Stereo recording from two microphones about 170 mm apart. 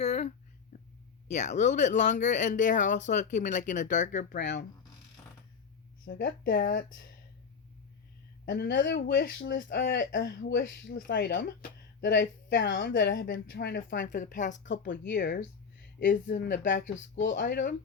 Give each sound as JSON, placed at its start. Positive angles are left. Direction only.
{"t": 0.0, "sound": "a sound", "side_deg": 40}
{"t": 1.3, "sound": "speech", "side_deg": 45}
{"t": 4.4, "sound": "speech", "side_deg": 90}
{"t": 6.1, "sound": "speech", "side_deg": 60}
{"t": 8.4, "sound": "a woman's voice", "side_deg": 70}
{"t": 9.6, "sound": "speech", "side_deg": 55}
{"t": 10.1, "sound": "a woman's voice", "side_deg": 60}
{"t": 11.9, "sound": "a woman's voice", "side_deg": 90}
{"t": 15.0, "sound": "a woman's voice", "side_deg": 75}
{"t": 16.7, "sound": "speech", "side_deg": 45}
{"t": 17.2, "sound": "speech", "side_deg": 90}
{"t": 17.4, "sound": "speech", "side_deg": 50}